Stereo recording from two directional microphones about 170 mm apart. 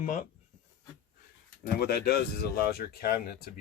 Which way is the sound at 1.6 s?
65° left (ahead or behind).